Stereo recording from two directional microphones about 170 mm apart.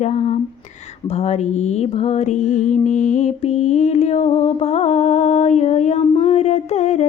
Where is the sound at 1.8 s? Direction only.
40° left (ahead or behind).